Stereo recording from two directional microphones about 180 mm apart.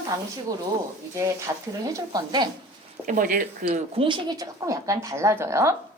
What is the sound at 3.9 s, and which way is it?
A woman's voice, 25° right (ahead or behind).